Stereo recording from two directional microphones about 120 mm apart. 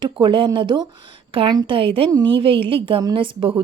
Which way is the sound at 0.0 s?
45° right (ahead or behind).